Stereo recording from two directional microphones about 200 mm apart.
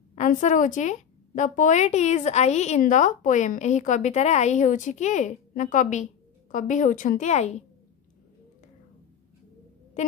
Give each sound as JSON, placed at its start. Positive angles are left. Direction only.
{"t": 0.1, "sound": "a woman's voice", "side_deg": 35}